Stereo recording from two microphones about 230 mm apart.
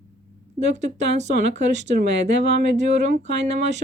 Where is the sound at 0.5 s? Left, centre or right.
Right.